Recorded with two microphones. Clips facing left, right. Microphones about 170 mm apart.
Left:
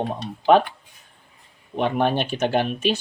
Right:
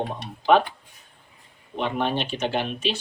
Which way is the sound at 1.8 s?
50° left (ahead or behind).